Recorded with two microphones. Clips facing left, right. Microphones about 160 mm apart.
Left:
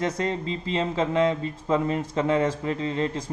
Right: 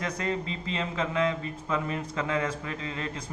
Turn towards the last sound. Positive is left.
turn(degrees=30)  # may be behind; listen again after turning